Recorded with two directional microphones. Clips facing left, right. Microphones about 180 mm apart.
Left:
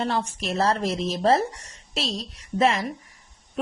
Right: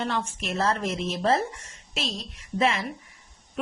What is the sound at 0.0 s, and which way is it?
Speech, 35° left (ahead or behind).